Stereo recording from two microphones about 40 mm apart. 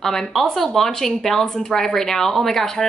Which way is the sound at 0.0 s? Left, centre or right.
Centre.